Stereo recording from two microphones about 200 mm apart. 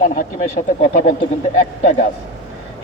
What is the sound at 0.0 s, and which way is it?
Speech, 40° left (ahead or behind).